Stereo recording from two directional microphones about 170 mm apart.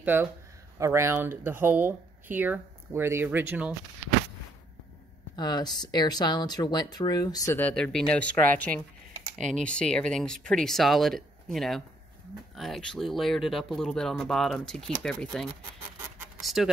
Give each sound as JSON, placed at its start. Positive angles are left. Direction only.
{"t": 0.0, "sound": "speech", "side_deg": -10}
{"t": 5.3, "sound": "speech", "side_deg": 25}
{"t": 7.5, "sound": "speech", "side_deg": 10}
{"t": 16.3, "sound": "a sound", "side_deg": 0}